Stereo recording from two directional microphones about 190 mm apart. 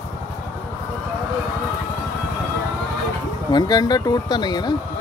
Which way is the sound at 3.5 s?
20° left (ahead or behind).